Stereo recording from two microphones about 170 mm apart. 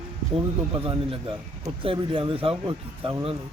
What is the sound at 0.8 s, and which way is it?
Speech, 30° right (ahead or behind).